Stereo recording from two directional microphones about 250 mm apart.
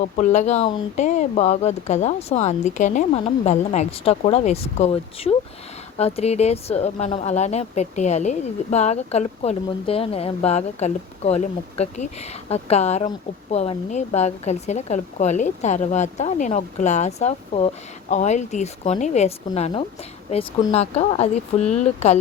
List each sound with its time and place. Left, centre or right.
0.0 s a woman's voice: left